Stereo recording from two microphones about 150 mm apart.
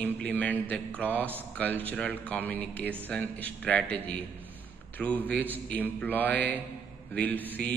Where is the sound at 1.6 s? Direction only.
10° left (ahead or behind).